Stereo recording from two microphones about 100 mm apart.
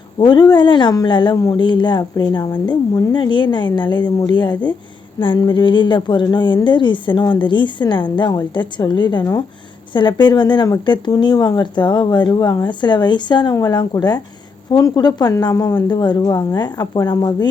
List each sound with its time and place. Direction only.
0.2 s a woman's voice: 45° left (ahead or behind)
13.5 s a woman's voice: 40° left (ahead or behind)